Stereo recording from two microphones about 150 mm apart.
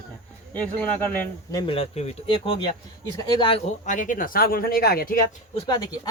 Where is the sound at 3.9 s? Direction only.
60° left (ahead or behind); by 5.1 s 90° left.